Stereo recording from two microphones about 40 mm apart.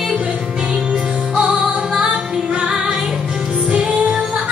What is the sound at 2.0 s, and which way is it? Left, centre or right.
Female singing, right.